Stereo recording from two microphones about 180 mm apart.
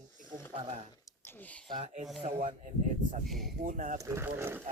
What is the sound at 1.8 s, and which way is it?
Speech, 40° right (ahead or behind).